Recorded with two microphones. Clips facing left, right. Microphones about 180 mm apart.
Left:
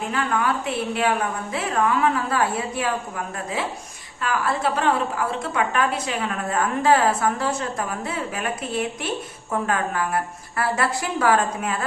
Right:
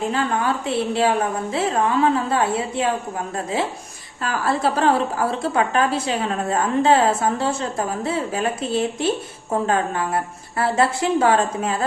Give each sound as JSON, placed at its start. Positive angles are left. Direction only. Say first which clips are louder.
{"t": 0.1, "sound": "a woman's voice", "louder": "right 2 dB", "side_deg": -30}